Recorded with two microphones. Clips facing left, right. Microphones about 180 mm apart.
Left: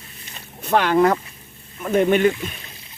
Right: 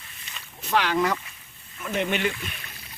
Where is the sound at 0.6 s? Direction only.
55° left (ahead or behind).